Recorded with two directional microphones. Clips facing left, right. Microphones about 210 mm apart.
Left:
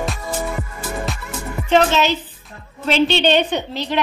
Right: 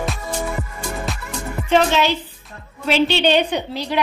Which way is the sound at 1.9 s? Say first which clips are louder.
Even; 10° right (ahead or behind).